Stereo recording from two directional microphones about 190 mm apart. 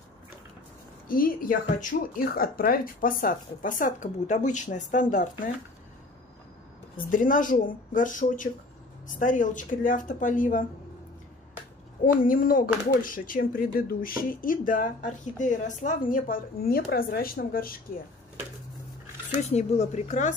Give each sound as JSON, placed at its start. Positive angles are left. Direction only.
{"t": 1.0, "sound": "speech", "side_deg": 50}
{"t": 7.0, "sound": "speech", "side_deg": 45}
{"t": 12.0, "sound": "speech", "side_deg": 45}
{"t": 19.4, "sound": "speech", "side_deg": 35}